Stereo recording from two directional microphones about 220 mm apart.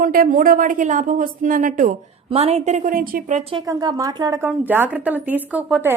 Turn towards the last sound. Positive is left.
turn(degrees=-10)  # may be behind; listen again after turning